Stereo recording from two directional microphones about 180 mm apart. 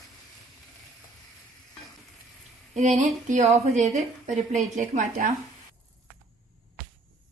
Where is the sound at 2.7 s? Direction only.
40° right (ahead or behind).